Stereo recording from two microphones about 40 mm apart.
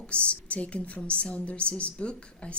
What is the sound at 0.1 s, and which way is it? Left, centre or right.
A woman's voice, left.